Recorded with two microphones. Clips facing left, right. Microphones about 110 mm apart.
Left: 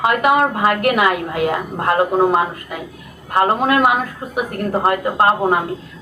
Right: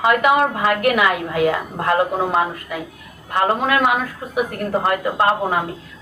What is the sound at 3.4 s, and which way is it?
Speech, 35° left (ahead or behind).